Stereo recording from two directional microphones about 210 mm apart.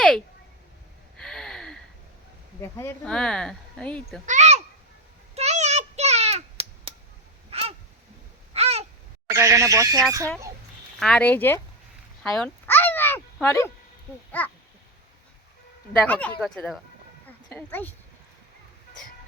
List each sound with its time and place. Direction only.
1.1 s gasp: centre (ahead or behind)
2.6 s speech: 10° left (ahead or behind)
4.3 s a sound: 35° right (ahead or behind)
9.3 s speech: 15° right (ahead or behind)
11.0 s speech: 5° left (ahead or behind)
12.2 s a sound: 5° left (ahead or behind)
14.4 s speech: 10° left (ahead or behind)
15.9 s speech: 5° left (ahead or behind)
17.2 s sheep: 10° left (ahead or behind)